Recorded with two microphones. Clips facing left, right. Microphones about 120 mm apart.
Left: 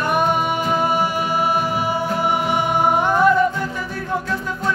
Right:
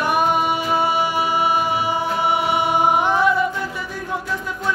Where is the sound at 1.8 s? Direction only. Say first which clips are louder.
Even; 45° left (ahead or behind).